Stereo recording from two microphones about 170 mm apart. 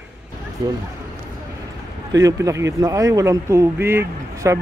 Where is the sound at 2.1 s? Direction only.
20° right (ahead or behind).